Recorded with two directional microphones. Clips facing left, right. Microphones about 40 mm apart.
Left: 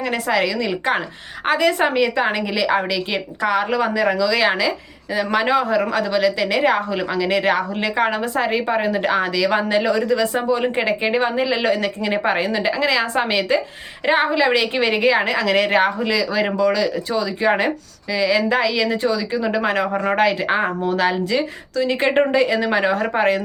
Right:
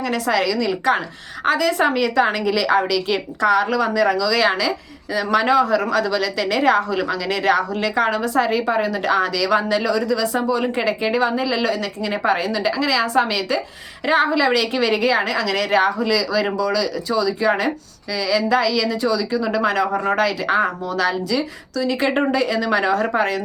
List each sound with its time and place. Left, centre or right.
0.0 s speech: left